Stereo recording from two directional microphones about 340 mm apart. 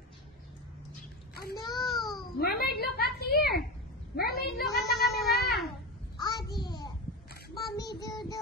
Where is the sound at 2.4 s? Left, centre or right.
Left.